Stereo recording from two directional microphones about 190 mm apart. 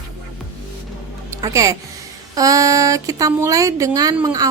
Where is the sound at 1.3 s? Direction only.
15° right (ahead or behind).